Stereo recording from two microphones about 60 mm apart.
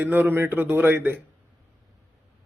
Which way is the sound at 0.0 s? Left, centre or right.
Right.